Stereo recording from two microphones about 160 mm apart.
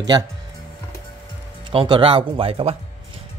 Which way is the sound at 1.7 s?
30° right (ahead or behind).